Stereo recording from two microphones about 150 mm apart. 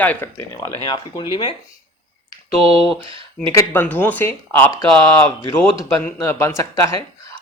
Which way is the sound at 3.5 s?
15° left (ahead or behind).